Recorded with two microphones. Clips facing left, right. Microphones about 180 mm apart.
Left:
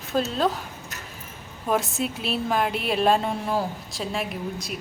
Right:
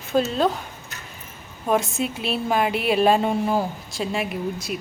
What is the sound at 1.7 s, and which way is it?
A woman's voice, centre (ahead or behind).